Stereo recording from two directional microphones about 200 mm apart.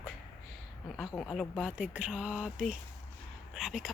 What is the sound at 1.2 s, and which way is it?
Speech, centre (ahead or behind).